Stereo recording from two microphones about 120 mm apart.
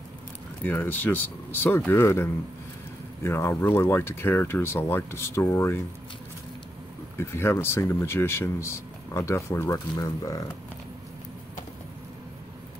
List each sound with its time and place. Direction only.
0.7 s speech: 15° left (ahead or behind)
7.2 s speech: 20° left (ahead or behind)